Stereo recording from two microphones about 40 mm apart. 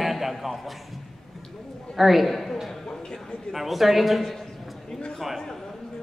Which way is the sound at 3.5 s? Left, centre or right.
Centre.